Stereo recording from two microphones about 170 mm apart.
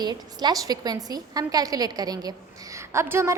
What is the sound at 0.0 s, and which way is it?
A woman's voice, 25° right (ahead or behind).